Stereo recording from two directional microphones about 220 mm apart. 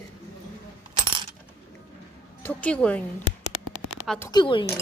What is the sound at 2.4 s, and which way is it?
Speech, 10° left (ahead or behind).